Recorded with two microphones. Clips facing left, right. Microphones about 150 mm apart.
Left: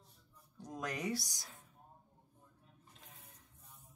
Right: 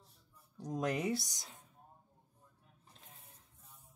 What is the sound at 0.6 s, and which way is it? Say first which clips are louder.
Speech: right 6 dB; 30° right (ahead or behind).